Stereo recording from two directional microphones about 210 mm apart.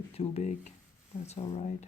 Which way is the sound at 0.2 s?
30° left (ahead or behind).